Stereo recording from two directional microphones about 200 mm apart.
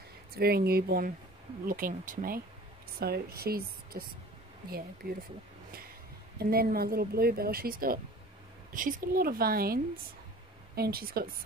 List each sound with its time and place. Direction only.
0.4 s speech: 50° right (ahead or behind)
6.3 s speech: 50° right (ahead or behind)
10.8 s speech: 50° right (ahead or behind)